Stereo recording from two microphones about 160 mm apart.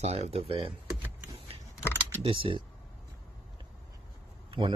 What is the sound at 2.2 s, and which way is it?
Speech, 35° right (ahead or behind).